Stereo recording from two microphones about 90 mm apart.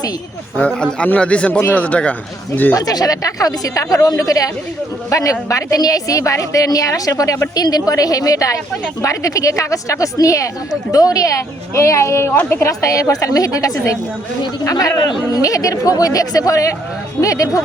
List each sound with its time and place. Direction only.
0.7 s speech: 10° left (ahead or behind)
2.7 s a woman's voice: 45° left (ahead or behind)